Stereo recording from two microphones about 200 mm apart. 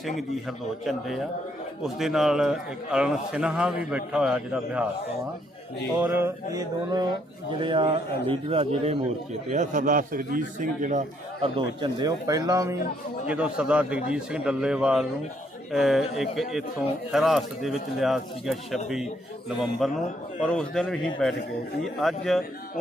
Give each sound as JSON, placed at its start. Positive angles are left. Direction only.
{"t": 0.0, "sound": "speech", "side_deg": 0}
{"t": 6.0, "sound": "a man's voice", "side_deg": -10}
{"t": 11.4, "sound": "a man's voice", "side_deg": -25}
{"t": 13.2, "sound": "speech", "side_deg": -5}
{"t": 19.8, "sound": "speech", "side_deg": 0}